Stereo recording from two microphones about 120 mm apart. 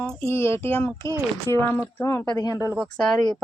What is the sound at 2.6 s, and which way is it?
Speech, 20° right (ahead or behind).